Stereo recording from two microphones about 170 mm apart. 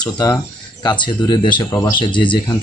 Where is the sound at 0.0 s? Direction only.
25° left (ahead or behind).